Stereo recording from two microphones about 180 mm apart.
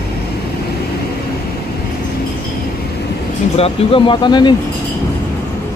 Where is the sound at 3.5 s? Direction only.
30° left (ahead or behind).